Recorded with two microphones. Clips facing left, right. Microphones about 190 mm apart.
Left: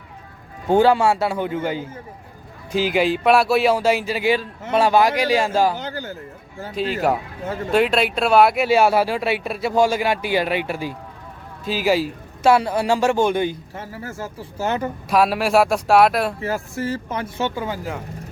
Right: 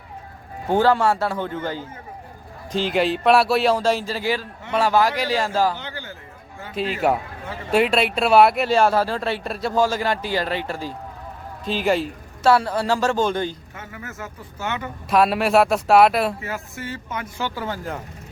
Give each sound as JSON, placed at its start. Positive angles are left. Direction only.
{"t": 0.7, "sound": "a man's voice", "side_deg": 15}
{"t": 5.7, "sound": "a man's voice", "side_deg": 40}
{"t": 6.7, "sound": "speech", "side_deg": 0}
{"t": 7.4, "sound": "speech", "side_deg": 45}
{"t": 7.7, "sound": "speech", "side_deg": 0}
{"t": 13.7, "sound": "speech", "side_deg": 35}
{"t": 15.1, "sound": "speech", "side_deg": 0}
{"t": 16.4, "sound": "speech", "side_deg": 35}